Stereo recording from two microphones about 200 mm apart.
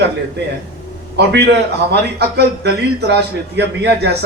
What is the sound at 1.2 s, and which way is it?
A man's voice, 60° right (ahead or behind).